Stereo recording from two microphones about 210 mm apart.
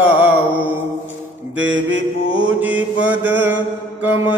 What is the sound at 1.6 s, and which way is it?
Mantra, 60° right (ahead or behind).